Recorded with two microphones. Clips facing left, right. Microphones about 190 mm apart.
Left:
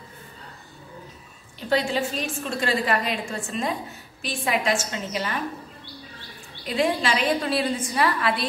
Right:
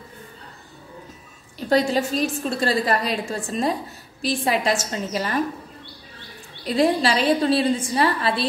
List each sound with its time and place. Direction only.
1.7 s a woman's voice: 40° right (ahead or behind)
6.6 s a woman's voice: 35° right (ahead or behind)